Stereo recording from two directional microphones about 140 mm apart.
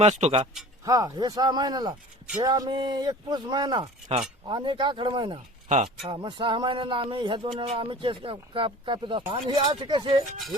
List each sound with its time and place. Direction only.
0.0 s speech: 50° right (ahead or behind)
0.9 s speech: 25° right (ahead or behind)